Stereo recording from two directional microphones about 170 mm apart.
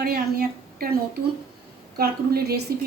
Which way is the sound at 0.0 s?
65° right (ahead or behind).